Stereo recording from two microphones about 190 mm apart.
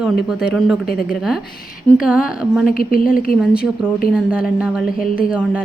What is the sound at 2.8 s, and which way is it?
Speech, 45° left (ahead or behind).